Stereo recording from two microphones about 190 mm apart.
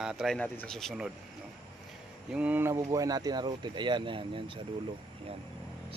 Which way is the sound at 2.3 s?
5° right (ahead or behind).